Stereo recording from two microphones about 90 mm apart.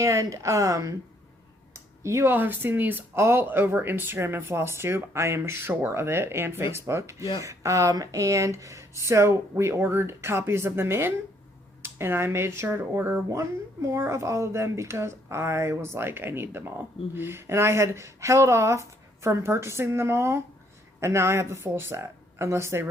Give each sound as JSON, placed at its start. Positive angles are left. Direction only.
{"t": 0.0, "sound": "speech", "side_deg": -35}
{"t": 1.7, "sound": "a sound", "side_deg": -35}
{"t": 2.3, "sound": "speech", "side_deg": -20}